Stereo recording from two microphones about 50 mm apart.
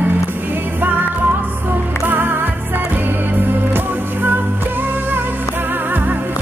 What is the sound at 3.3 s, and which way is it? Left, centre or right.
Music, right.